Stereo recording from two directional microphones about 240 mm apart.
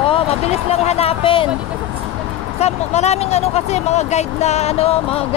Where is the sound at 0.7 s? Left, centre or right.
Left.